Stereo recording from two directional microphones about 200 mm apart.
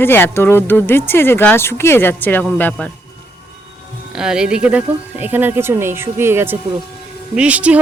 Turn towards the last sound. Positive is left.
turn(degrees=-5)  # may be behind; listen again after turning